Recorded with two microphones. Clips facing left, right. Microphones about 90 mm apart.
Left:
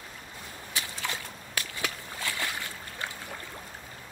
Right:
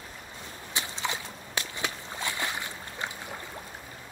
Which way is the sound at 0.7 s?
20° right (ahead or behind).